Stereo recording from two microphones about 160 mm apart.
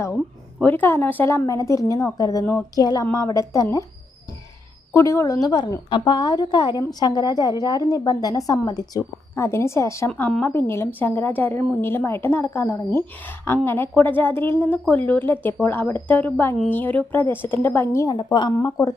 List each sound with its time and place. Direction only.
0.6 s a woman's voice: 10° left (ahead or behind)
4.9 s a woman's voice: 20° left (ahead or behind)
10.1 s a woman's voice: 5° left (ahead or behind)